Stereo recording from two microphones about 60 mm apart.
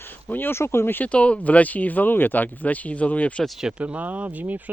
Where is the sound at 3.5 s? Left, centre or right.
Centre.